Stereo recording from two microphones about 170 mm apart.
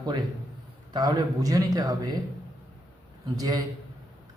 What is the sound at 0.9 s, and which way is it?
A man's voice, 25° right (ahead or behind).